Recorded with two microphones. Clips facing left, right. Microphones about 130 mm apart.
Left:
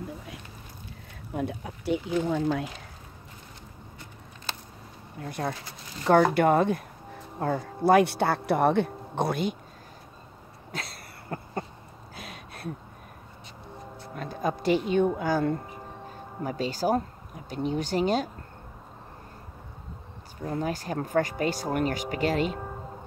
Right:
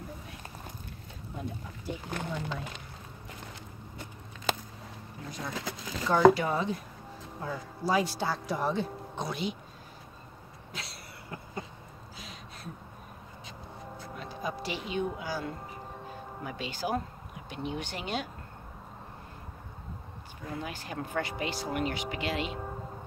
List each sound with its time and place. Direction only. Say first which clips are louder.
1.3 s speech: left 8 dB; 75° left (ahead or behind)
2.2 s speech: left 10 dB; 90° left
5.4 s speech: left 4 dB; 65° left (ahead or behind)
10.7 s cough: left 6 dB; 50° left (ahead or behind)
12.2 s a sound: left 6 dB; 60° left (ahead or behind)
14.1 s a sound: left 7 dB; 50° left (ahead or behind)
14.9 s a woman's voice: left 9 dB; 50° left (ahead or behind)
20.4 s speech: left 8 dB; 40° left (ahead or behind)